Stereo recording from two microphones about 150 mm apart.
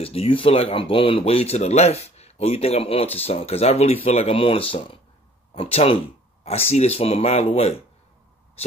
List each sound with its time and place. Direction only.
0.0 s speech: 40° left (ahead or behind)